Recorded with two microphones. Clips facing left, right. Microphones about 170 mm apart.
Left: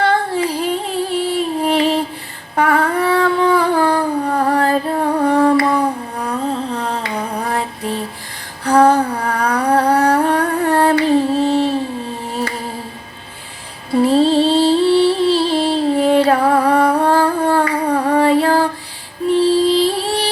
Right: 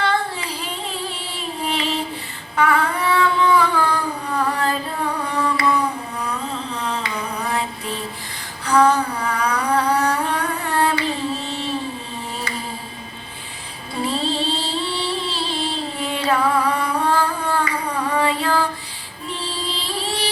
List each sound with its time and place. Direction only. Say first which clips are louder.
0.0 s a sound: left 6 dB; 50° left (ahead or behind)
8.6 s humming: left 5 dB; 55° left (ahead or behind)
12.3 s music: left 8 dB; 55° left (ahead or behind)
13.9 s music: left 11 dB; 55° left (ahead or behind)